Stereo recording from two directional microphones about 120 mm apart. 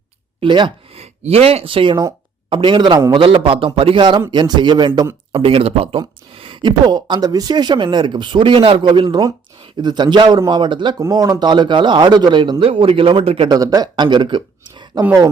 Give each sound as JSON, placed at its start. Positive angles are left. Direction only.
{"t": 0.3, "sound": "speech", "side_deg": -40}
{"t": 0.9, "sound": "speech", "side_deg": -60}
{"t": 5.3, "sound": "speech", "side_deg": -50}
{"t": 6.0, "sound": "speech", "side_deg": -40}
{"t": 13.5, "sound": "speech", "side_deg": -30}